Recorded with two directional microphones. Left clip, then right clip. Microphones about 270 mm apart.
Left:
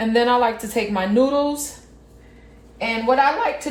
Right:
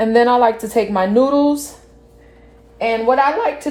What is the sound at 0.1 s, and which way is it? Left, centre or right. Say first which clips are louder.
Speech: right 4 dB; right.